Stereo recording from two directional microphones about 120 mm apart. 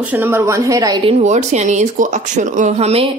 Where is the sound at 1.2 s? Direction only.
75° right (ahead or behind).